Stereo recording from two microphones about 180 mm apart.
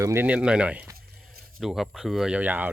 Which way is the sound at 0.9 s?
55° right (ahead or behind).